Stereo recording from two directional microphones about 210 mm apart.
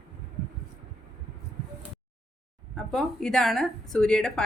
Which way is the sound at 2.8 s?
Centre (ahead or behind).